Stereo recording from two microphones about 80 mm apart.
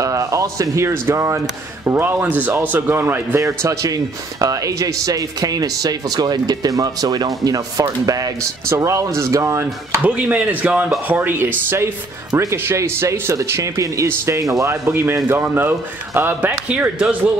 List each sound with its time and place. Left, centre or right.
0.0 s speech: right
1.9 s speech: right
3.3 s a man's voice: right
10.0 s speech: centre; by 14.8 s right
14.9 s speech: right